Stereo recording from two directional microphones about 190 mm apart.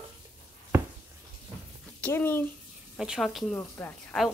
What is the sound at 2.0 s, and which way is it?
Speech, 10° left (ahead or behind).